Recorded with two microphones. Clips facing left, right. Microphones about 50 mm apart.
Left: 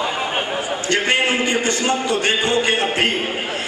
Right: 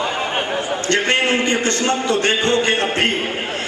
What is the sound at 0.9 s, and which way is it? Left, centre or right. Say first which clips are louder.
A man's voice: right 1 dB; centre.